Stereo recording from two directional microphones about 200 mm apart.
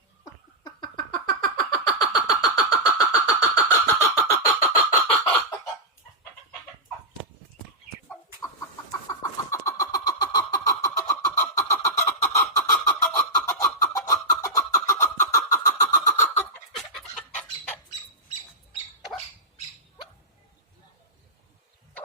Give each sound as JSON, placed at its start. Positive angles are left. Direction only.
{"t": 0.6, "sound": "vehicle", "side_deg": 20}
{"t": 8.9, "sound": "vehicle", "side_deg": 15}
{"t": 16.7, "sound": "chicken", "side_deg": 0}